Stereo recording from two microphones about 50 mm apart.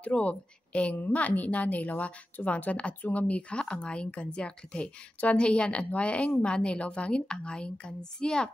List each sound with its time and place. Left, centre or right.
0.0 s a woman's voice: left